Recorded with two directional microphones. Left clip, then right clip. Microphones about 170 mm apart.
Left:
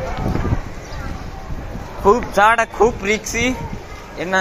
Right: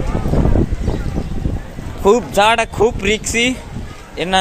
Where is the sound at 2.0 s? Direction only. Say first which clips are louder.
Right 1 dB; 65° right (ahead or behind).